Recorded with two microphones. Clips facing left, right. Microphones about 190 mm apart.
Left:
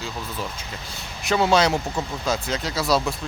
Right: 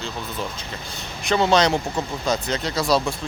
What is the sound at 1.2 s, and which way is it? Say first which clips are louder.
Speech: right 1 dB; 5° left (ahead or behind).